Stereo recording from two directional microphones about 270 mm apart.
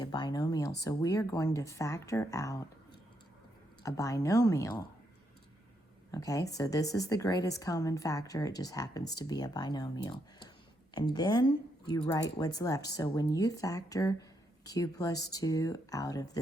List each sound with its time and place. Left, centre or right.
0.0 s a woman's voice: centre
3.8 s a woman's voice: centre
6.1 s a woman's voice: centre